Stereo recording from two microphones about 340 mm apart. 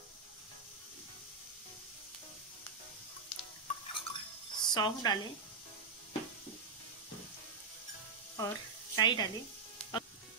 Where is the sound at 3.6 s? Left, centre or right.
Centre.